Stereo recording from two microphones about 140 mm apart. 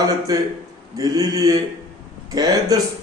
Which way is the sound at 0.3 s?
25° right (ahead or behind).